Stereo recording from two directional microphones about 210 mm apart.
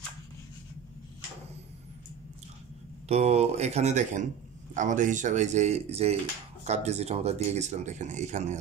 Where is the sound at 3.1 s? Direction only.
30° right (ahead or behind).